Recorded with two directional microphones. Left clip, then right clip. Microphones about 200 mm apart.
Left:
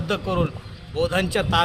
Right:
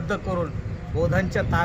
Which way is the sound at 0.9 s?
40° left (ahead or behind).